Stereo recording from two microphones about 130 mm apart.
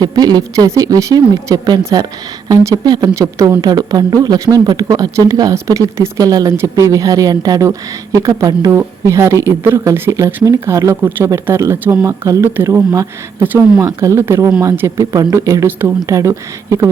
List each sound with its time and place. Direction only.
0.0 s speech: 30° right (ahead or behind)